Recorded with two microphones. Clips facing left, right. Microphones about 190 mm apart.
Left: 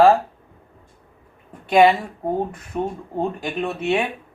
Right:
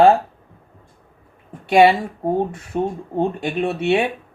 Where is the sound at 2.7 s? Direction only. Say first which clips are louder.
Right 3 dB; 30° right (ahead or behind).